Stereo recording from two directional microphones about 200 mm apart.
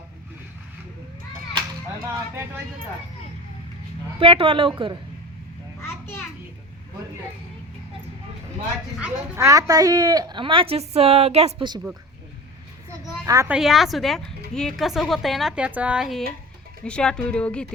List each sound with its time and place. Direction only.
4.2 s speech: 25° right (ahead or behind)
5.8 s children playing: 10° left (ahead or behind)
9.0 s speech: 10° right (ahead or behind); by 11.8 s 25° right (ahead or behind)
13.2 s a woman's voice: 15° right (ahead or behind)
13.5 s a woman's voice: centre (ahead or behind)